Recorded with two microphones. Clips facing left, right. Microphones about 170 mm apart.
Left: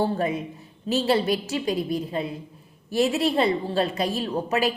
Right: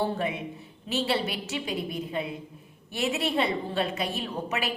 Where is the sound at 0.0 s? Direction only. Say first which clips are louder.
Left 4 dB; 40° left (ahead or behind).